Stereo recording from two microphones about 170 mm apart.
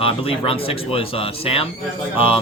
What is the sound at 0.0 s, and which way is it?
A man's voice, 30° left (ahead or behind).